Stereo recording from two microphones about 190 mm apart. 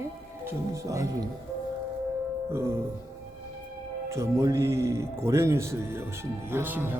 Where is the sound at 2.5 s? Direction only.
15° right (ahead or behind).